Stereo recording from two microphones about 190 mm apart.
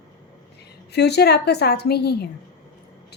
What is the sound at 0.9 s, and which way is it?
A woman's voice, 60° left (ahead or behind).